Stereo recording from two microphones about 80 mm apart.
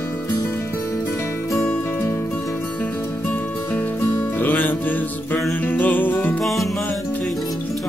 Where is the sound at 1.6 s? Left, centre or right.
Left.